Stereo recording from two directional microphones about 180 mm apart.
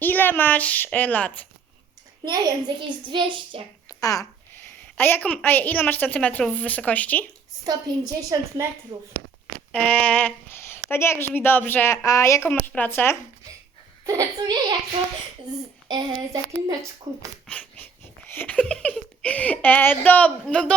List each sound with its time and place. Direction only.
0.0 s speech: 10° left (ahead or behind)
2.2 s a child's voice: 25° right (ahead or behind)
4.0 s speech: 20° left (ahead or behind)
7.6 s a child's voice: 20° right (ahead or behind)
9.7 s a sound: 10° left (ahead or behind)
10.8 s speech: 15° left (ahead or behind)
14.0 s a child's voice: 20° right (ahead or behind)
15.9 s a child's voice: 25° right (ahead or behind)
17.4 s a sound: 5° left (ahead or behind)
18.3 s speech: 10° left (ahead or behind)